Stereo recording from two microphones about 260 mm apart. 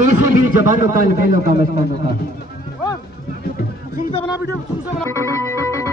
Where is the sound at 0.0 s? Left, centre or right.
Right.